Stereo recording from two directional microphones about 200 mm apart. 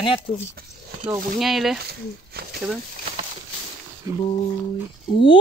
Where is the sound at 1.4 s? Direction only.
Centre (ahead or behind).